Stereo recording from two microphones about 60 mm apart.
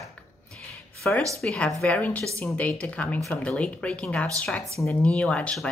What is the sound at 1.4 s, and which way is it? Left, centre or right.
Speech, centre.